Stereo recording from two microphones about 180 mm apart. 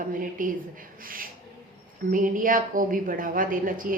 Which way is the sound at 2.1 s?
50° right (ahead or behind).